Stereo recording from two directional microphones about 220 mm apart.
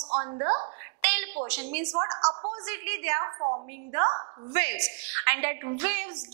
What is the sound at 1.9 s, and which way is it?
Speech, 25° right (ahead or behind).